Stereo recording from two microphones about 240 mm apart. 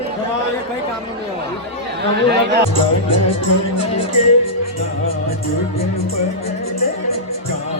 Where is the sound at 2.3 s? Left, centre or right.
Right.